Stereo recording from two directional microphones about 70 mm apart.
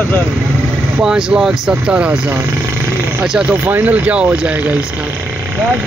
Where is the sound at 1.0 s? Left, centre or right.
Centre.